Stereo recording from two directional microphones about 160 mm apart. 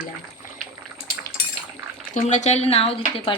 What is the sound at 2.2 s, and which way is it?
Speech, 50° left (ahead or behind).